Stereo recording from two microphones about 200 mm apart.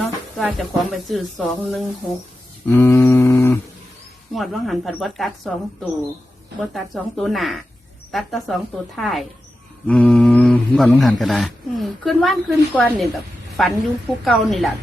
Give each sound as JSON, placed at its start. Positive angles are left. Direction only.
{"t": 0.0, "sound": "speech", "side_deg": 0}
{"t": 2.6, "sound": "humming", "side_deg": 10}
{"t": 4.4, "sound": "speech", "side_deg": 0}